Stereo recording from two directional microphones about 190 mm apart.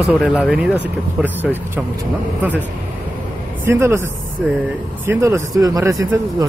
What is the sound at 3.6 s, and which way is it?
Speech, 10° right (ahead or behind).